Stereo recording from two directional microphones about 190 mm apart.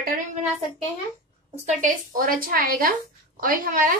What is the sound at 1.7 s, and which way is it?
A woman's voice, 45° right (ahead or behind).